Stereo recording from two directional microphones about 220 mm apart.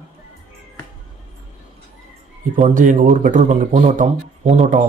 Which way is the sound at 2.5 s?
35° right (ahead or behind).